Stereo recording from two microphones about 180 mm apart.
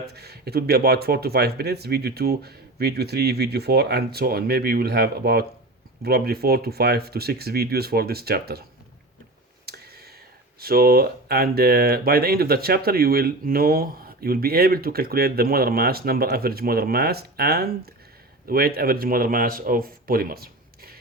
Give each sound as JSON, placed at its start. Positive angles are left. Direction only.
{"t": 0.1, "sound": "speech", "side_deg": -65}
{"t": 9.6, "sound": "a sound", "side_deg": -60}
{"t": 10.6, "sound": "speech", "side_deg": -55}